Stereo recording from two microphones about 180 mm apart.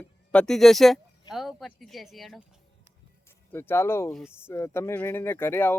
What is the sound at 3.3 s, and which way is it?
Speech, 15° left (ahead or behind).